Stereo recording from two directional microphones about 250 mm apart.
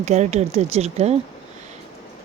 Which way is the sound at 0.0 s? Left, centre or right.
Right.